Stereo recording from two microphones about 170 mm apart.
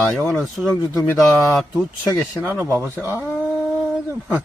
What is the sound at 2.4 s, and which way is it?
Speech, 15° right (ahead or behind).